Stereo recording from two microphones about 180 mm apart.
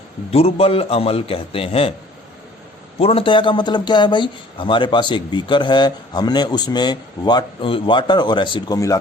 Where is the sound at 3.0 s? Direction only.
30° left (ahead or behind).